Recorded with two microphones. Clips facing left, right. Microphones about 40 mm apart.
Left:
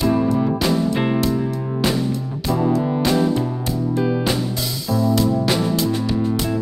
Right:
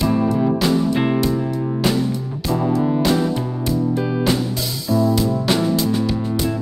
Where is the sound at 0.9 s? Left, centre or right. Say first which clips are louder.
Right 1 dB; centre.